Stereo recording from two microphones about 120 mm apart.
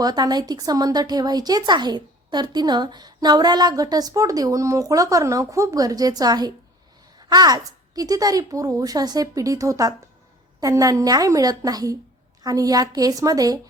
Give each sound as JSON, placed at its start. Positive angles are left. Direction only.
{"t": 0.0, "sound": "a woman's voice", "side_deg": -35}